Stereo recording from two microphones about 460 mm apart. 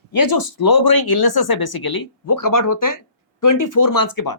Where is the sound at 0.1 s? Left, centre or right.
Left.